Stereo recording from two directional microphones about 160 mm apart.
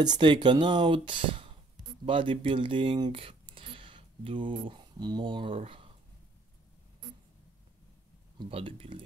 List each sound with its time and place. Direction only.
0.0 s speech: 30° right (ahead or behind)
8.4 s speech: 35° right (ahead or behind)